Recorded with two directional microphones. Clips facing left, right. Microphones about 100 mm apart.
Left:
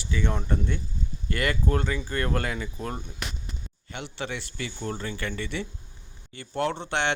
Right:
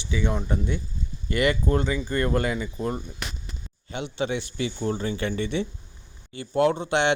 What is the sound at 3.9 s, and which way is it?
A man's voice, 20° right (ahead or behind).